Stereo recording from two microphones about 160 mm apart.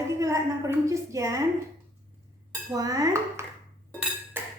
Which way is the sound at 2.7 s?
20° right (ahead or behind).